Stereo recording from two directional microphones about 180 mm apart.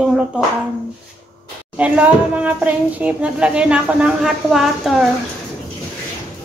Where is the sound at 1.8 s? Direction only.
5° right (ahead or behind).